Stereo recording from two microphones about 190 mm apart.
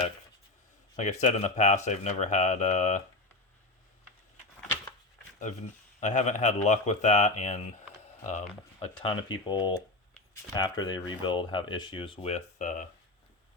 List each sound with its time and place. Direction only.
0.9 s speech: 40° left (ahead or behind)
5.4 s speech: 40° left (ahead or behind)
9.0 s speech: 25° left (ahead or behind); by 12.9 s 40° left (ahead or behind)